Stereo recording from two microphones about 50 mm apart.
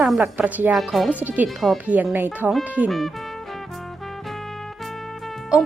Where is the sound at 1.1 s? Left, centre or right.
Right.